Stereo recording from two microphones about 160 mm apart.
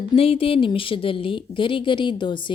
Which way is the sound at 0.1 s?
35° left (ahead or behind).